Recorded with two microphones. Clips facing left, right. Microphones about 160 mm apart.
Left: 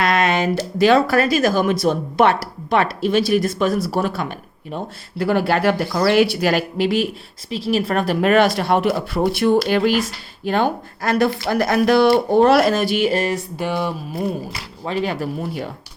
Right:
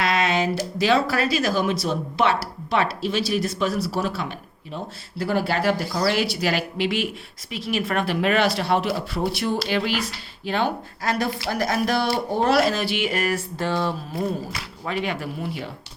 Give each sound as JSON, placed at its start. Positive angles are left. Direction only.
{"t": 0.0, "sound": "a sound", "side_deg": 55}
{"t": 0.8, "sound": "a woman's voice", "side_deg": 55}
{"t": 13.6, "sound": "speech", "side_deg": 15}
{"t": 14.8, "sound": "speech", "side_deg": 35}